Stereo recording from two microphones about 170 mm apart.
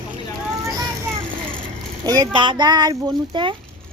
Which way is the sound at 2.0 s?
20° right (ahead or behind).